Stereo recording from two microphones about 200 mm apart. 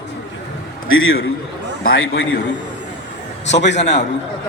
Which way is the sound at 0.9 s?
80° left.